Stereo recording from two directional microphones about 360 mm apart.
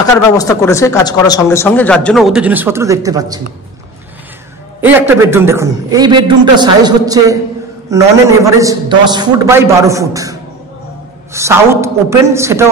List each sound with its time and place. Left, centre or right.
0.4 s speech: centre
4.8 s a man's voice: centre
11.3 s a man's voice: centre